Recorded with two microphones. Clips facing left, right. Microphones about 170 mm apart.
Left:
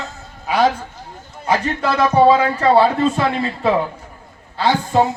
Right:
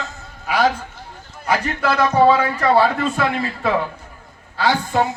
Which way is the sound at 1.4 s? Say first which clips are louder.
Left 1 dB; 25° left (ahead or behind).